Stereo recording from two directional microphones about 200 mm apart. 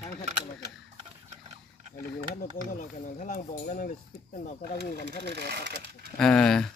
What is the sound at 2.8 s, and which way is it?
Speech, 40° left (ahead or behind).